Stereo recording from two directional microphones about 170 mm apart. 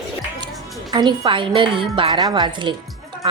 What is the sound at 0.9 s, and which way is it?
A woman's voice, 25° right (ahead or behind).